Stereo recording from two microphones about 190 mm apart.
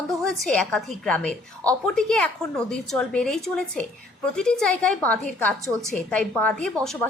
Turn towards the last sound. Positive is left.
turn(degrees=5)  # may be behind; listen again after turning